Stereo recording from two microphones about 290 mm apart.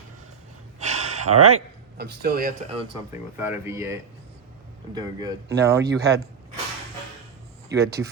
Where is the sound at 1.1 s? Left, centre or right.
Right.